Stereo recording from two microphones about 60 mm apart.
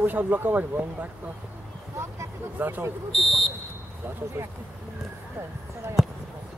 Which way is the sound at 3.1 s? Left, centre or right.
Centre.